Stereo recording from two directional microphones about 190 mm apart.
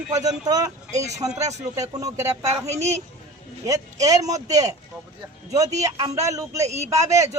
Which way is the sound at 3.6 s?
15° right (ahead or behind).